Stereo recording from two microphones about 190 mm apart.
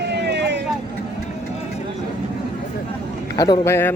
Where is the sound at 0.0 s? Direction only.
60° right (ahead or behind).